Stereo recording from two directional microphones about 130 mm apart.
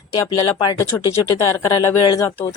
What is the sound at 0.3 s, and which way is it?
Speech, 30° left (ahead or behind).